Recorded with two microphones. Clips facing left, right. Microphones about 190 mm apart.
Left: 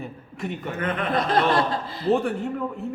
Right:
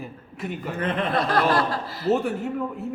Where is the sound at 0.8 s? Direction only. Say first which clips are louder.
Right 2 dB; 30° right (ahead or behind).